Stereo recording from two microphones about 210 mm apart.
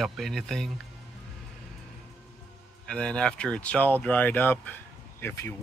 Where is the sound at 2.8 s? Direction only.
5° left (ahead or behind).